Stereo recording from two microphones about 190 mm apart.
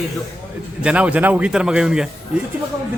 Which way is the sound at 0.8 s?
5° right (ahead or behind).